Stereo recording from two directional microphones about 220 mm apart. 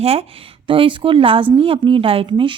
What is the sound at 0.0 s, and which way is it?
A woman's voice, 25° right (ahead or behind).